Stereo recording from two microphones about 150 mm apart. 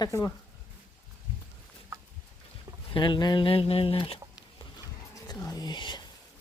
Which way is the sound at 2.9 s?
30° left (ahead or behind).